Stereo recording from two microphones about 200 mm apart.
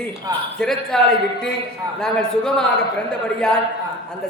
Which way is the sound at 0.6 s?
Centre (ahead or behind).